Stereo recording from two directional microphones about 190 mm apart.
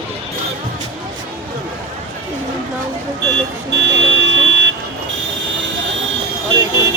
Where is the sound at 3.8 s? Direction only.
75° right (ahead or behind).